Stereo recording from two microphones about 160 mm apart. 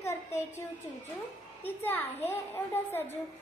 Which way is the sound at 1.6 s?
10° left (ahead or behind).